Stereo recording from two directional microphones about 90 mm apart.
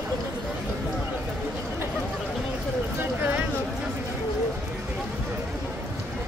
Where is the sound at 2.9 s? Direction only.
20° right (ahead or behind).